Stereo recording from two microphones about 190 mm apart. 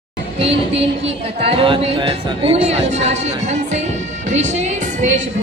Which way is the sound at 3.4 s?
40° right (ahead or behind).